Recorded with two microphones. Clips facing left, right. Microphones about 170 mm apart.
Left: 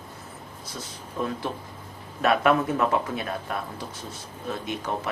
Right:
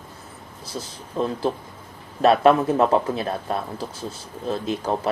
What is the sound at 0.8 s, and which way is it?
Speech, 30° right (ahead or behind).